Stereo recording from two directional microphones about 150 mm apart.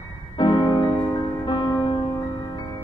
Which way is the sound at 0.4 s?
30° left (ahead or behind).